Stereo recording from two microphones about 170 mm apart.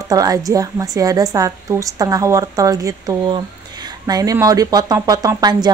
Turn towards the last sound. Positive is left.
turn(degrees=-20)  # may be behind; listen again after turning